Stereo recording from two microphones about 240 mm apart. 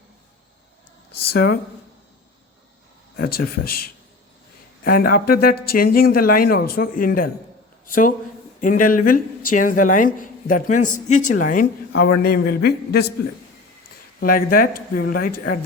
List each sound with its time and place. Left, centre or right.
1.3 s speech: left
3.2 s speech: left
14.2 s speech: left